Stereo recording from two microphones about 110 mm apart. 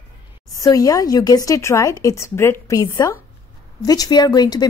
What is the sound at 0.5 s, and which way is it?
A woman's voice, 35° left (ahead or behind).